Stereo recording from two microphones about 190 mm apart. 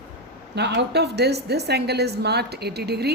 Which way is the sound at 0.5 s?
65° right (ahead or behind).